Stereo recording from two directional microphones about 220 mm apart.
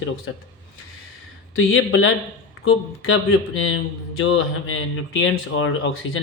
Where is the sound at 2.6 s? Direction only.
65° left (ahead or behind).